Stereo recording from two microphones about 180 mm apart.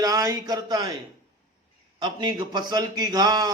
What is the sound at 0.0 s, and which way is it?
Speech, 20° right (ahead or behind).